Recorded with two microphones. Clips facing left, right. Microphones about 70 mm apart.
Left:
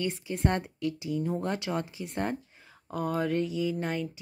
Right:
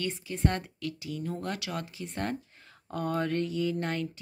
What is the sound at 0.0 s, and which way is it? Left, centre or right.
Speech, centre.